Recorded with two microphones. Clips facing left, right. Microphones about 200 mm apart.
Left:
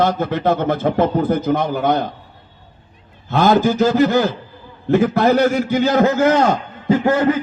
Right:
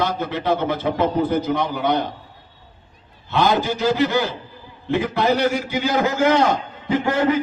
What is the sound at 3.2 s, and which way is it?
A man's voice, 45° left (ahead or behind).